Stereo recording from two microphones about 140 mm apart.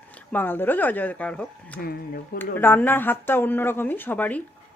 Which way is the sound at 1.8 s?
90° left.